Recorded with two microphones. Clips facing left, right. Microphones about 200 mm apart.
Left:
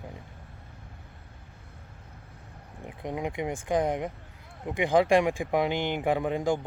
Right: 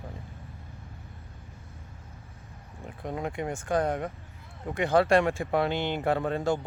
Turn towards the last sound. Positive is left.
turn(degrees=15)  # may be behind; listen again after turning